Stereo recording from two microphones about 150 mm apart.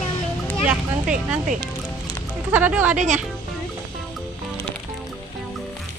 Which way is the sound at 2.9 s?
55° right (ahead or behind).